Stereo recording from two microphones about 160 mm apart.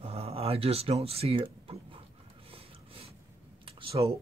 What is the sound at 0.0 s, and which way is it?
Speech, 40° right (ahead or behind).